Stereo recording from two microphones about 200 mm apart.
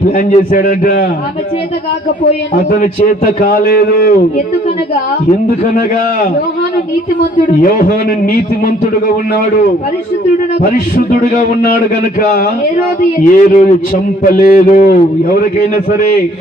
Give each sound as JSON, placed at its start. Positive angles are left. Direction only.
{"t": 0.2, "sound": "a man's voice", "side_deg": 45}
{"t": 2.6, "sound": "a man's voice", "side_deg": 45}
{"t": 7.6, "sound": "a man's voice", "side_deg": 45}
{"t": 10.6, "sound": "a man's voice", "side_deg": 40}
{"t": 13.3, "sound": "a man's voice", "side_deg": 40}